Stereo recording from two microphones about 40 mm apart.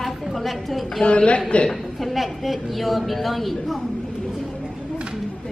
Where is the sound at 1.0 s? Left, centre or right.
Left.